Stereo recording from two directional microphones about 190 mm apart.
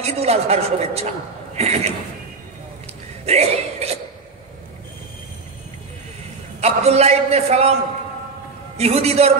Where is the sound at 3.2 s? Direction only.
35° right (ahead or behind).